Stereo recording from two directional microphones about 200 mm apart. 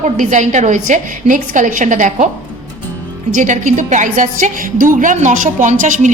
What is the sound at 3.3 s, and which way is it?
A woman's voice, 40° right (ahead or behind).